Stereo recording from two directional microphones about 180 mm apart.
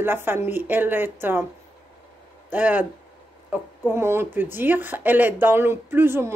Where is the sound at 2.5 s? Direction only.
10° right (ahead or behind).